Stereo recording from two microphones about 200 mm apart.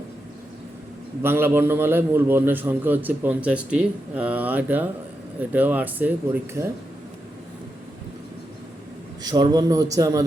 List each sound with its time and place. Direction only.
1.2 s a man's voice: 10° right (ahead or behind)
9.2 s a man's voice: 20° right (ahead or behind)